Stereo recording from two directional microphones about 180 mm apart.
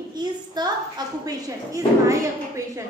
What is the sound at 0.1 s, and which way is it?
A woman's voice, 25° right (ahead or behind).